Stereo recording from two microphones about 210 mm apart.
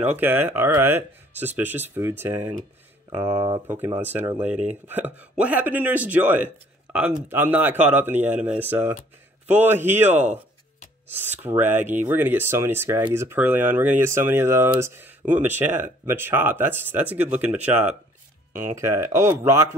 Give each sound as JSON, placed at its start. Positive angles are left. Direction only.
{"t": 0.0, "sound": "speech", "side_deg": -10}
{"t": 11.4, "sound": "speech", "side_deg": -10}